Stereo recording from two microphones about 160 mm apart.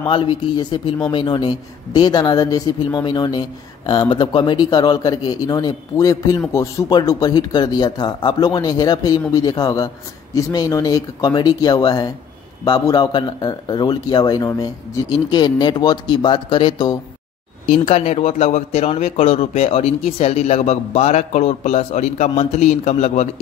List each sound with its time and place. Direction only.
0.0 s a man's voice: 30° left (ahead or behind)
17.6 s a man's voice: 40° left (ahead or behind)